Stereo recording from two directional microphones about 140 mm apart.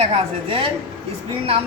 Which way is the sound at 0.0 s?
40° right (ahead or behind).